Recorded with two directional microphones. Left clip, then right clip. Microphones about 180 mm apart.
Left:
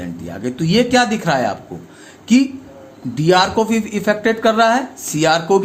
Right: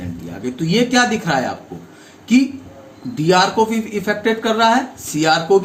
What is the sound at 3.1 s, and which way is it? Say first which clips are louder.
Speech: left 1 dB; 60° left (ahead or behind).